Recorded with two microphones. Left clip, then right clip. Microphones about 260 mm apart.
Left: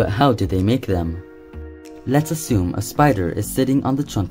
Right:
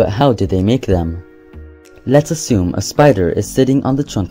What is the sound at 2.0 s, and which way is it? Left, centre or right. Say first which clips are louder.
Speech: right 8 dB; centre.